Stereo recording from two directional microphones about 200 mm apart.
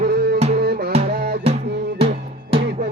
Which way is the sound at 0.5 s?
50° right (ahead or behind).